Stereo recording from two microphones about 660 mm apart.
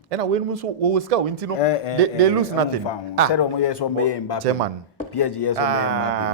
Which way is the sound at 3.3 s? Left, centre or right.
Left.